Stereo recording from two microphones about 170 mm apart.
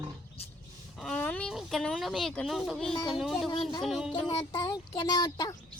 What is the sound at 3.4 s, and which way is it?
Speech, 25° left (ahead or behind).